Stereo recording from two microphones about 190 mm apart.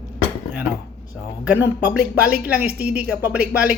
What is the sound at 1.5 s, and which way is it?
A man's voice, 10° right (ahead or behind).